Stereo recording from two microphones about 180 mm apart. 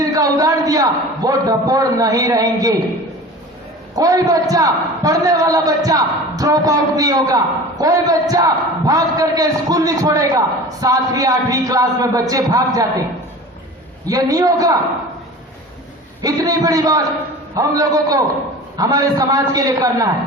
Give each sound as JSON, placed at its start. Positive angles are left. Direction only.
{"t": 0.0, "sound": "a man's voice", "side_deg": -20}
{"t": 3.9, "sound": "a man's voice", "side_deg": -20}
{"t": 14.1, "sound": "a man's voice", "side_deg": -20}
{"t": 16.2, "sound": "a man's voice", "side_deg": -20}